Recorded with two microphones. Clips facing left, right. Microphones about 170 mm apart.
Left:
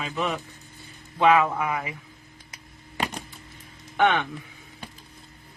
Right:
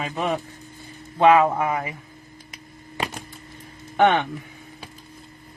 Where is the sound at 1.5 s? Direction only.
40° right (ahead or behind).